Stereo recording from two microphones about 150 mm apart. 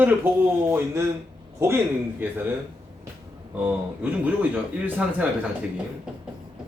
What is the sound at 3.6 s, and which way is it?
Speech, 10° right (ahead or behind).